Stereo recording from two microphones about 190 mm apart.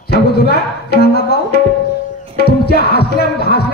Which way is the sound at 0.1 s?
60° left (ahead or behind).